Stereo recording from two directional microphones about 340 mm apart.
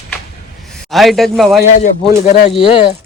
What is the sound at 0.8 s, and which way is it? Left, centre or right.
Speech, centre.